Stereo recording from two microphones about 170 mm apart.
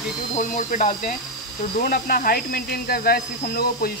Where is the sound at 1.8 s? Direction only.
55° left (ahead or behind).